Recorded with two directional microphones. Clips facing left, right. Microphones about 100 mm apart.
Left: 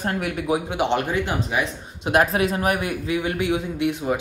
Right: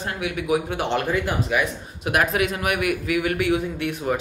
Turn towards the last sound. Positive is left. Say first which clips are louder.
# left 2 dB
turn(degrees=20)  # may be behind; listen again after turning